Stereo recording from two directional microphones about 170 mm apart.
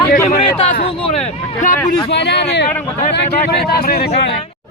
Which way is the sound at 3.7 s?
65° left (ahead or behind).